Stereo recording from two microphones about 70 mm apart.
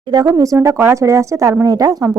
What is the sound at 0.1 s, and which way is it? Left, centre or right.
Speech, right.